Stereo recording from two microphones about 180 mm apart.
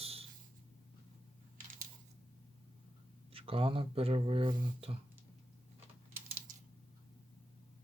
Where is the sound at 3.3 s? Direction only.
30° right (ahead or behind).